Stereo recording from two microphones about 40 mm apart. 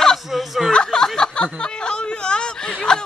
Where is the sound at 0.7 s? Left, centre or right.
Centre.